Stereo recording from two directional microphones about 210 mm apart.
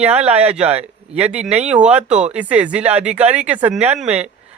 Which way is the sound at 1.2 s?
5° right (ahead or behind).